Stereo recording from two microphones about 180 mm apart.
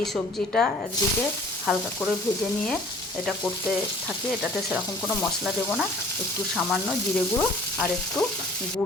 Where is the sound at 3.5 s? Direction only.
Centre (ahead or behind).